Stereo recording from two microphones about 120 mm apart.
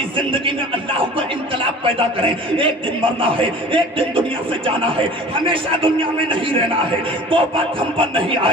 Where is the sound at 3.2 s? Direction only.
45° right (ahead or behind).